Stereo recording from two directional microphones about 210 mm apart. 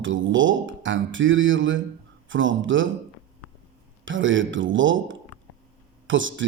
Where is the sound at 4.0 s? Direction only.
65° right (ahead or behind).